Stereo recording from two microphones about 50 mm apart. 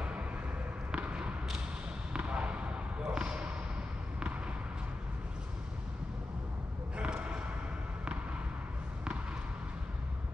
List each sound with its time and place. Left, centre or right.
0.9 s basketball bounce: right
2.1 s fireworks: right
3.1 s basketball bounce: centre
7.0 s a sound: right